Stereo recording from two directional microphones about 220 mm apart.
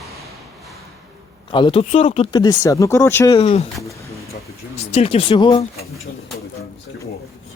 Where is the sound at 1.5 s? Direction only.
20° left (ahead or behind).